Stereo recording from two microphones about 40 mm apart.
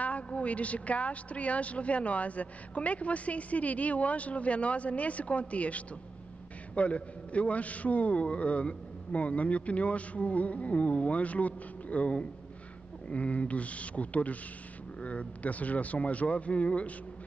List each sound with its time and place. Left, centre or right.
0.0 s a woman's voice: left